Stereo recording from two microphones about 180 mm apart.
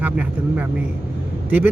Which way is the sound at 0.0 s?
10° right (ahead or behind).